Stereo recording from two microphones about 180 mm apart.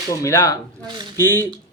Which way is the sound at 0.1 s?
15° left (ahead or behind).